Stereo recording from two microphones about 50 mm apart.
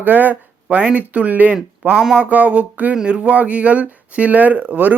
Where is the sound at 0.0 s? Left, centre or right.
Right.